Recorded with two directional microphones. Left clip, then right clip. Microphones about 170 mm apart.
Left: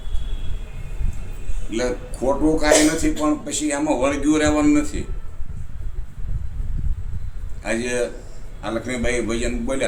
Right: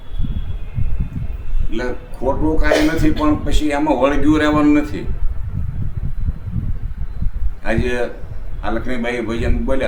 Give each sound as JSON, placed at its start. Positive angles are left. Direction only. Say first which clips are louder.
{"t": 1.7, "sound": "a man's voice", "louder": "left 1 dB", "side_deg": -15}
{"t": 7.6, "sound": "a man's voice", "louder": "right 3 dB", "side_deg": -15}